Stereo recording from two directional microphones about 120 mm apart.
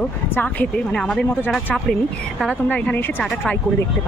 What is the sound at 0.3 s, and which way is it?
Speech, 15° left (ahead or behind).